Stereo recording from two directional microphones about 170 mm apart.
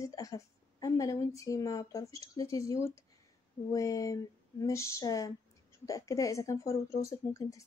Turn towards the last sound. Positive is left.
turn(degrees=20)  # may be behind; listen again after turning